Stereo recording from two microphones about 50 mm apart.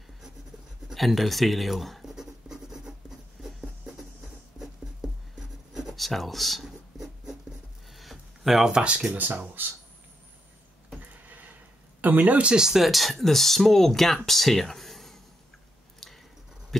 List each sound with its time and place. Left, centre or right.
0.9 s writing: centre
5.4 s writing: centre
7.9 s a sound: centre
9.1 s speech: right
11.2 s neigh: right
12.0 s speech: right
12.5 s speech: centre